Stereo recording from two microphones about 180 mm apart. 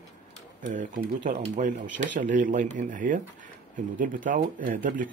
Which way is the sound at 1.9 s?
90° right.